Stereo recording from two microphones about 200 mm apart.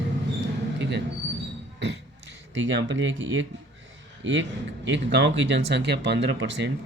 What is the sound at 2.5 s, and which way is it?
Speech, 65° right (ahead or behind).